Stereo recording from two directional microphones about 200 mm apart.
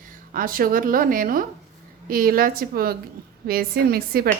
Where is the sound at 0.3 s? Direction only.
45° right (ahead or behind).